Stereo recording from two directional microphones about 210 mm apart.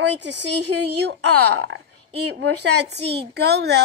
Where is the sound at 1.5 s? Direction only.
75° right (ahead or behind).